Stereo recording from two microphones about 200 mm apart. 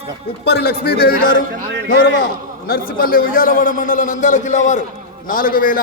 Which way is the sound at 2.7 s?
45° left (ahead or behind).